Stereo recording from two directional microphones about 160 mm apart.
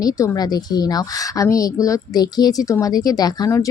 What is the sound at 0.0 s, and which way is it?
Speech, 25° left (ahead or behind).